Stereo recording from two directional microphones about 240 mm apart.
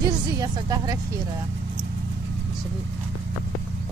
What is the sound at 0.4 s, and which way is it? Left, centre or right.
Speech, centre.